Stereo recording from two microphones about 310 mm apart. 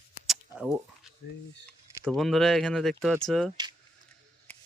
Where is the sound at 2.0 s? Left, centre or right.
Centre.